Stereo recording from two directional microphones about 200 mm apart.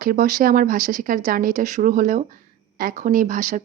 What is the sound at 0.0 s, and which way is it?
A woman's voice, 45° right (ahead or behind).